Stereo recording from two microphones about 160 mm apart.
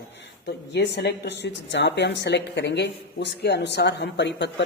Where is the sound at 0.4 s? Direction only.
90° left.